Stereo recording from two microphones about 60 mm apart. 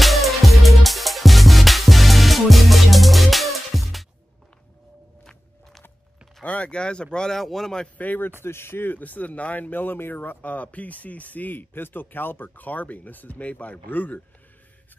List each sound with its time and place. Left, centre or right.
0.0 s music: centre
6.4 s speech: left
8.0 s speech: left
8.4 s speech: left